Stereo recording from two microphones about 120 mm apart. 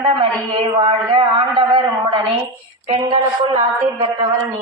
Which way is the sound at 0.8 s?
40° right (ahead or behind).